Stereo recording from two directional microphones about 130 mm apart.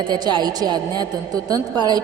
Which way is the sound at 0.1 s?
35° right (ahead or behind).